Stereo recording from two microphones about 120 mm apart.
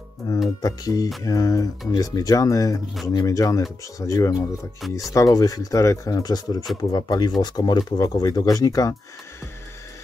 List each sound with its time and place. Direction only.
0.2 s speech: 30° left (ahead or behind)